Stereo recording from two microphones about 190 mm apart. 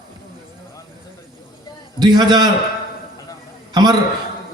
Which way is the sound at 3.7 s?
20° right (ahead or behind).